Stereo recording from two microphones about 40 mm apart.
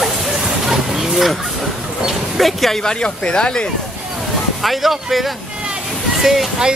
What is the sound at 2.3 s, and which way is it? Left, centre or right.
Speech, centre.